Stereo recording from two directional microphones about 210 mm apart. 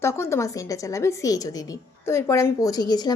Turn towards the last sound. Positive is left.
turn(degrees=20)  # may be behind; listen again after turning